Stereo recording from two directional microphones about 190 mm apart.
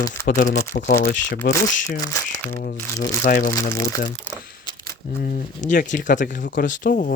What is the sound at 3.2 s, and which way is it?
Speech, 45° left (ahead or behind).